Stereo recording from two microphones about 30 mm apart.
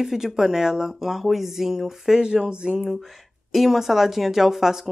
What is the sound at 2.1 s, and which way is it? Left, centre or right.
Speech, right.